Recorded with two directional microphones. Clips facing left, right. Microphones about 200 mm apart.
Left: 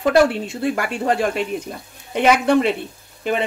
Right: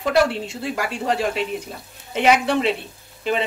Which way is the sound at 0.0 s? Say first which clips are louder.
Left 4 dB; 55° left (ahead or behind).